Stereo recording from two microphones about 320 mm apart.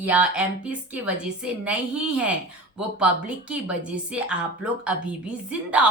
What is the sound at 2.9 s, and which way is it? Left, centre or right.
Speech, centre.